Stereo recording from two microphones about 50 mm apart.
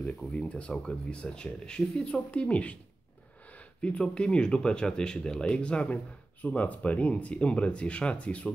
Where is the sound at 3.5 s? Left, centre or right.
Left.